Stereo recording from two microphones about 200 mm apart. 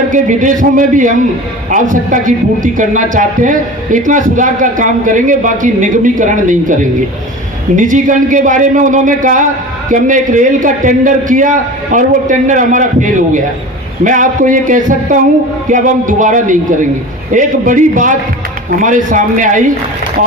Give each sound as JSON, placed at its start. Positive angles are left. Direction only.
{"t": 0.1, "sound": "a man's voice", "side_deg": -40}
{"t": 7.8, "sound": "a man's voice", "side_deg": -40}